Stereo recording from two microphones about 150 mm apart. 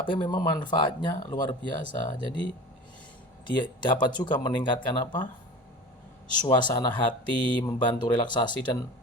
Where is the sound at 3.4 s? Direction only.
30° left (ahead or behind).